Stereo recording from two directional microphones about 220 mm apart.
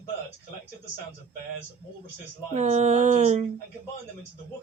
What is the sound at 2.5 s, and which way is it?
Speech, 30° right (ahead or behind).